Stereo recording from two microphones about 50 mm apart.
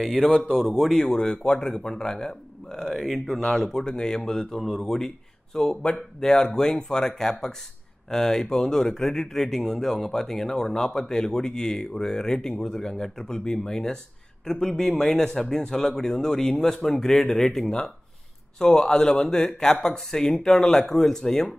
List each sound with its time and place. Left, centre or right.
0.0 s speech: centre
0.5 s speech: centre
0.9 s speech: centre